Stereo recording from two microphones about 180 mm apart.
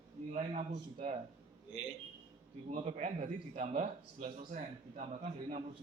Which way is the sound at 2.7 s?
40° right (ahead or behind).